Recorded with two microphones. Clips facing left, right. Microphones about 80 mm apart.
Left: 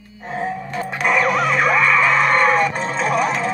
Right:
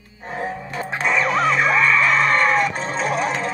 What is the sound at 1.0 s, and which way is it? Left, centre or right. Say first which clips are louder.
Music: left 3 dB; left.